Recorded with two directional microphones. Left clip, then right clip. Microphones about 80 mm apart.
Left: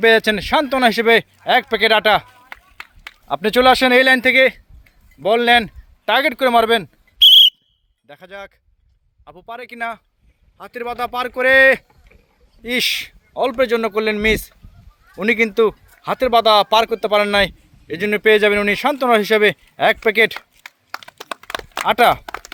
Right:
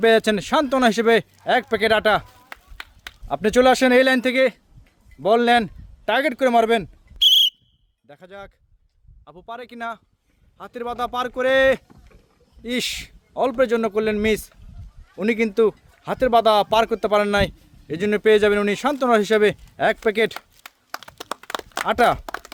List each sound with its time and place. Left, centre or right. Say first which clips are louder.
0.0 s speech: left 3 dB; right
6.1 s speech: left 4 dB; right
8.0 s speech: left 5 dB; centre
20.6 s a sound: left 3 dB; right
21.8 s speech: left 5 dB; right